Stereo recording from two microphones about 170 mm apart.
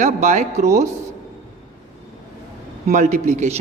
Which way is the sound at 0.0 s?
40° right (ahead or behind).